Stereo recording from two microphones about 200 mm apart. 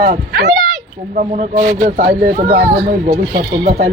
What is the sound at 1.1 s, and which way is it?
A man's voice, 40° right (ahead or behind).